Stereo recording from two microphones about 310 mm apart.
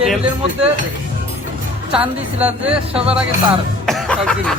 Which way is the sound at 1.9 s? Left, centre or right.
Centre.